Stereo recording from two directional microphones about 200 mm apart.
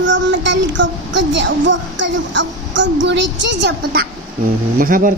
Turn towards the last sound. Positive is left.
turn(degrees=-45)  # may be behind; listen again after turning